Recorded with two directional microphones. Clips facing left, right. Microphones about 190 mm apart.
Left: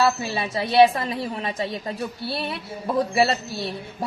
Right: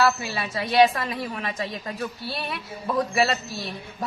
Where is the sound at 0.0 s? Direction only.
25° left (ahead or behind).